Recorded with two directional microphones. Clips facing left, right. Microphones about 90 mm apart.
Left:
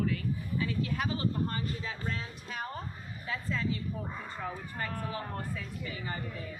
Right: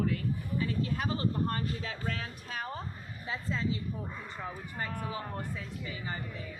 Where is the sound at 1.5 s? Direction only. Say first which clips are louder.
Right 1 dB; 65° right (ahead or behind).